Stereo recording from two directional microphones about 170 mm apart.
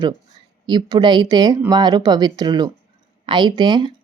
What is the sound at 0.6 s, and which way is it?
Speech, 25° right (ahead or behind).